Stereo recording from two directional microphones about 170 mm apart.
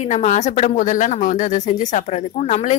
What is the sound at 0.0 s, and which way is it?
A woman's voice, 45° left (ahead or behind).